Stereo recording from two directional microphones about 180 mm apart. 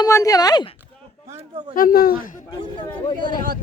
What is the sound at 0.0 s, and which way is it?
Speech, 20° left (ahead or behind).